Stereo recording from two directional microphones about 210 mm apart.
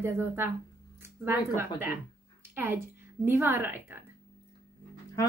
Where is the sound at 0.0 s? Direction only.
10° right (ahead or behind).